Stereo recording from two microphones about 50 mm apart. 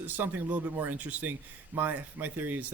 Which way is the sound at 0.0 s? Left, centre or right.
Right.